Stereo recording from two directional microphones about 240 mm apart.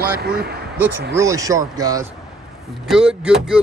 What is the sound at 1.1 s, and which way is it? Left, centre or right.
Speech, centre.